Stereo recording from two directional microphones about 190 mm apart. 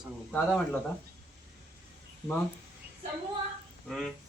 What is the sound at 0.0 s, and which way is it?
Speech, 5° left (ahead or behind).